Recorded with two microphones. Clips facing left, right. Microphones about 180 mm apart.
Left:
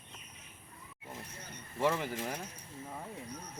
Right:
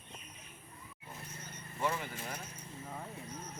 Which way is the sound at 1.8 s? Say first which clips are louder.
Left 5 dB; 90° left.